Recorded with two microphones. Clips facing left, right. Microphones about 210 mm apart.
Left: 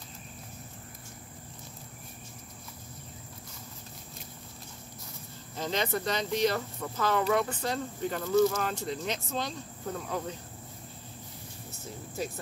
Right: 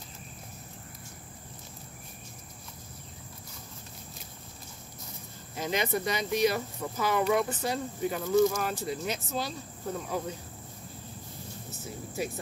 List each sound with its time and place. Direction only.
5.6 s speech: 10° right (ahead or behind)